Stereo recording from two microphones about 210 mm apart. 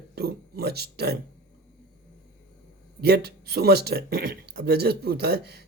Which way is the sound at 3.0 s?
50° right (ahead or behind).